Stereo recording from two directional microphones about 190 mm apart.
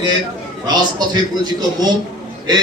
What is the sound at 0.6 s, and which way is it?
A man's voice, 20° right (ahead or behind).